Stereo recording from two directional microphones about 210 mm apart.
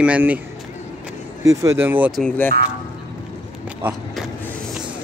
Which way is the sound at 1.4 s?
15° right (ahead or behind).